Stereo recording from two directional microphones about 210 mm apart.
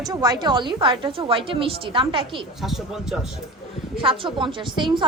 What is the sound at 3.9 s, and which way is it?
A woman's voice, 25° right (ahead or behind).